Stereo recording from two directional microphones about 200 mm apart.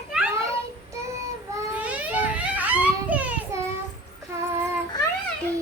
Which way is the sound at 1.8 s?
5° right (ahead or behind).